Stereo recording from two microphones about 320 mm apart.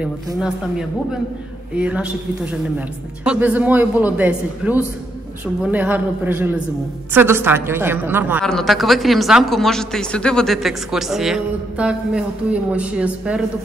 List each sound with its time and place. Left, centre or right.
0.0 s a woman's voice: centre
3.3 s a woman's voice: centre